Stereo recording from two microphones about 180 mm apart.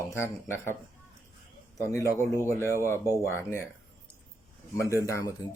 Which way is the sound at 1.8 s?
20° left (ahead or behind).